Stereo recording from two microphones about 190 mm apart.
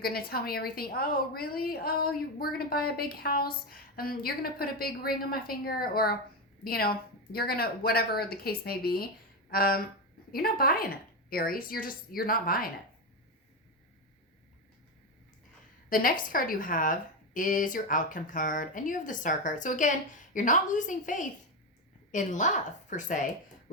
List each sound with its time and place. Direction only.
0.0 s a woman's voice: 55° left (ahead or behind)
15.9 s a woman's voice: 50° left (ahead or behind)